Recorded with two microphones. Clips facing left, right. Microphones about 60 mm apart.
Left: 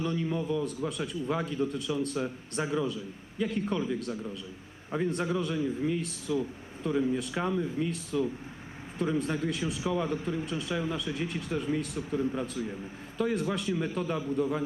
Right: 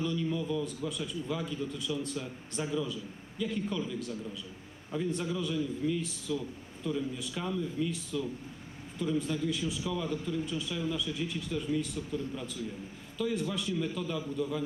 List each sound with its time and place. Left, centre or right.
0.0 s a man's voice: left
0.9 s a man's voice: left
9.0 s speech: left
9.8 s a man's voice: left
10.4 s a man's voice: left
13.7 s a man's voice: left